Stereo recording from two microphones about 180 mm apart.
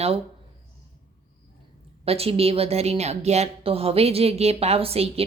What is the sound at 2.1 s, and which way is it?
A woman's voice, 35° right (ahead or behind).